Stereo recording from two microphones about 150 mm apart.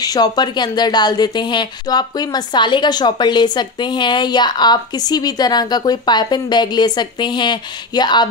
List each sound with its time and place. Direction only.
0.0 s a woman's voice: 25° left (ahead or behind)